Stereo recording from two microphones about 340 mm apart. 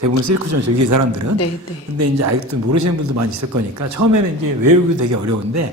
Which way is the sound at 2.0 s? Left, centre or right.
Right.